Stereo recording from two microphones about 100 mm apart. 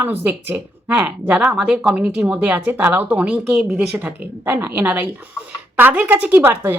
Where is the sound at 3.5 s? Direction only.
Centre (ahead or behind).